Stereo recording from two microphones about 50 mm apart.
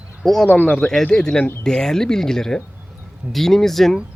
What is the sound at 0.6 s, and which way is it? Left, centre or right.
Speech, left.